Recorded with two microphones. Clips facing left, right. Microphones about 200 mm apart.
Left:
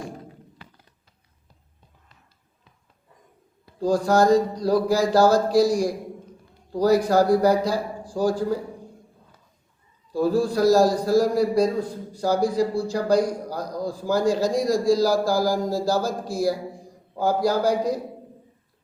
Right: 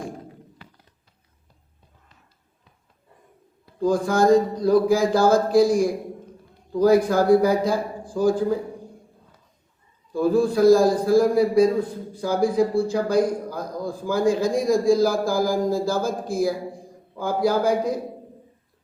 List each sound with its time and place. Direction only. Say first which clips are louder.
3.8 s speech: left 1 dB; 55° right (ahead or behind)
10.1 s speech: right 2 dB; 50° right (ahead or behind)